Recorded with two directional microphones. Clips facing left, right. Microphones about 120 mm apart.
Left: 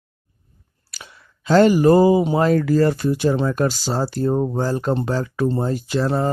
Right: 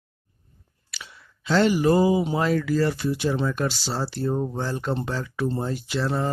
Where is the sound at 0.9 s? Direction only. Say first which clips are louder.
Left 1 dB; 45° left (ahead or behind).